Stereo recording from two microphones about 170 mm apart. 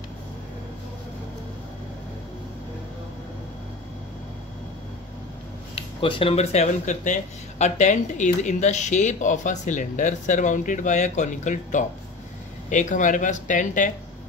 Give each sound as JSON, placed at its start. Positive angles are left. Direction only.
{"t": 5.8, "sound": "speech", "side_deg": 30}